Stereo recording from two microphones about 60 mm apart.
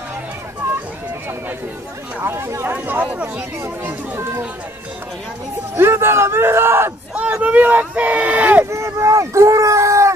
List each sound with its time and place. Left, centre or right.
2.1 s speech: right
2.6 s speech: right
5.8 s speech: right
7.4 s speech: right
8.6 s a sound: right